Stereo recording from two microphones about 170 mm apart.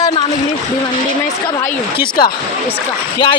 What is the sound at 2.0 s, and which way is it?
Speech, 60° left (ahead or behind).